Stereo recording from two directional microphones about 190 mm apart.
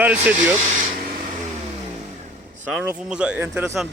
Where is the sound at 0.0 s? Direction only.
10° right (ahead or behind).